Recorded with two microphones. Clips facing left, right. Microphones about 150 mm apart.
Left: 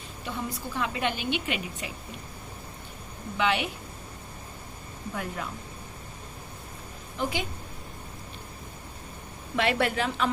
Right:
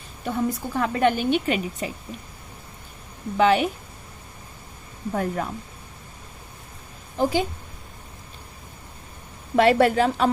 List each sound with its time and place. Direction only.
0.3 s a woman's voice: 45° right (ahead or behind)
3.3 s a woman's voice: 40° right (ahead or behind)
5.1 s a woman's voice: 45° right (ahead or behind)
7.2 s a woman's voice: 35° right (ahead or behind)
9.6 s a woman's voice: 40° right (ahead or behind)